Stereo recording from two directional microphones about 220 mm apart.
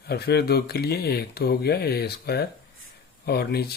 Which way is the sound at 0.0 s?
45° left (ahead or behind).